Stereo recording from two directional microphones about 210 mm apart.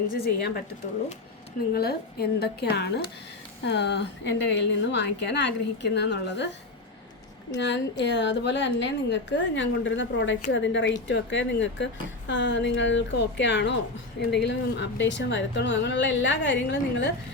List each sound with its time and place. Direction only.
0.2 s a woman's voice: 45° left (ahead or behind)
1.7 s a woman's voice: 50° left (ahead or behind)
7.5 s speech: 55° left (ahead or behind)